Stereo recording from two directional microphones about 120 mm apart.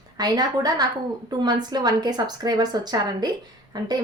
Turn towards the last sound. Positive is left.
turn(degrees=-35)  # may be behind; listen again after turning